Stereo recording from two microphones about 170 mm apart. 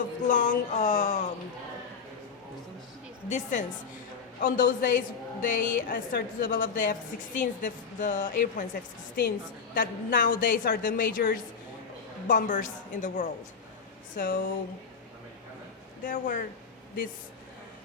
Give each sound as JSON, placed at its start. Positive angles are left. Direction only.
{"t": 0.3, "sound": "a woman's voice", "side_deg": 50}
{"t": 3.2, "sound": "a woman's voice", "side_deg": 45}
{"t": 16.0, "sound": "a woman's voice", "side_deg": 50}